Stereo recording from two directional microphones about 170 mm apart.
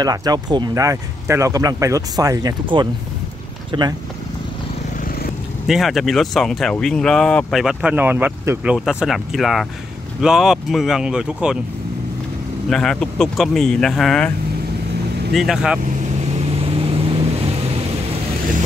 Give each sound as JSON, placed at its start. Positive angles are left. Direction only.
{"t": 0.0, "sound": "speech", "side_deg": -20}
{"t": 5.7, "sound": "speech", "side_deg": 0}
{"t": 12.6, "sound": "speech", "side_deg": 5}
{"t": 15.3, "sound": "speech", "side_deg": 0}
{"t": 16.6, "sound": "vehicle", "side_deg": -35}